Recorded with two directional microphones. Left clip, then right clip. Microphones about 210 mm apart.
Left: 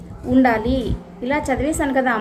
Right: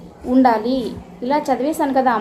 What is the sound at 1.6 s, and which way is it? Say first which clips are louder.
Speech: right 2 dB; 25° left (ahead or behind).